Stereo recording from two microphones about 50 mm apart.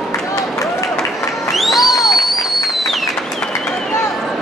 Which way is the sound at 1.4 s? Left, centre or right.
Centre.